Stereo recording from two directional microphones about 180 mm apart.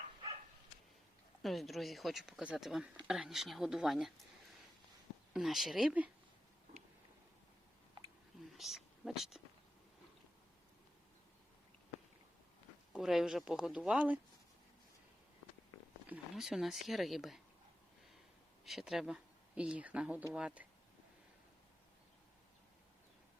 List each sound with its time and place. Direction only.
1.4 s speech: centre (ahead or behind)
5.3 s speech: centre (ahead or behind)
8.4 s speech: centre (ahead or behind)
12.9 s speech: centre (ahead or behind)
16.0 s speech: 5° right (ahead or behind)
18.6 s speech: centre (ahead or behind)